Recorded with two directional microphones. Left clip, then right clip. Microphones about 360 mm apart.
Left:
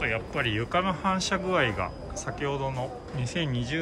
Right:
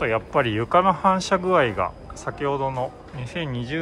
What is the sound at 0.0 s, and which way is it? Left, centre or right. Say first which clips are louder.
Speech: right 7 dB; centre.